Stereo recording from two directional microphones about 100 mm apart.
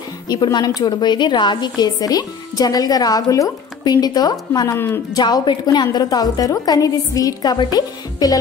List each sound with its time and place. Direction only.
0.3 s a woman's voice: 45° left (ahead or behind)
4.7 s speech: 25° left (ahead or behind)
5.1 s a woman's voice: 45° left (ahead or behind)